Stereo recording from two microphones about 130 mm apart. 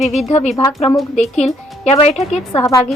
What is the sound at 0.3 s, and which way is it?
Speech, 55° left (ahead or behind).